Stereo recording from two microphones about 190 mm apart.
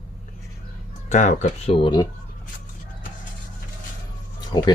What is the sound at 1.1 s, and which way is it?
Speech, 40° left (ahead or behind).